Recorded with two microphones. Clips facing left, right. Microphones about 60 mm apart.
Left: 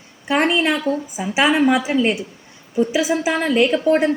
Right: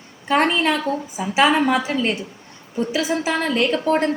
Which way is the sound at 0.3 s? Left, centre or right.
Centre.